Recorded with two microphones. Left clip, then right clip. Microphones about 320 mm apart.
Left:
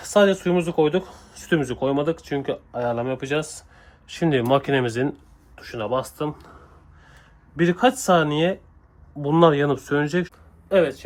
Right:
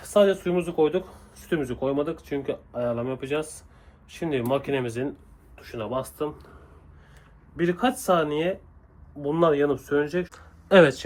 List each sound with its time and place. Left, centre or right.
0.0 s speech: left
7.5 s speech: left
10.3 s a sound: right